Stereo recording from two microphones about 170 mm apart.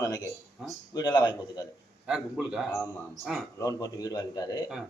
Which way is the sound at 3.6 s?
20° left (ahead or behind).